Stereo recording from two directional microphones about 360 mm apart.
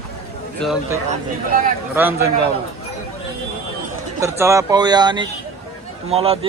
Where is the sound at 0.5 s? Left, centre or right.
Centre.